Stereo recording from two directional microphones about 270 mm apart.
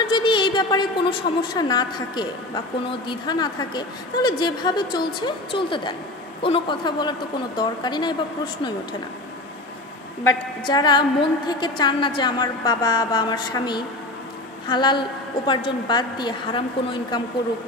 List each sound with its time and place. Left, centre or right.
0.0 s a sound: centre
1.5 s a woman's voice: centre
10.7 s a woman's voice: centre